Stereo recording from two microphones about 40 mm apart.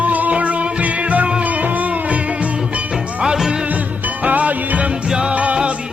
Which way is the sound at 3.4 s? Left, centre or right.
Centre.